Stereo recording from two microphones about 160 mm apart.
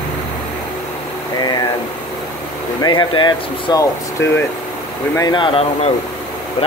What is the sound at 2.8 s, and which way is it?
Speech, 30° left (ahead or behind).